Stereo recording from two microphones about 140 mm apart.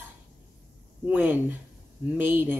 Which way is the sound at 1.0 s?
15° right (ahead or behind).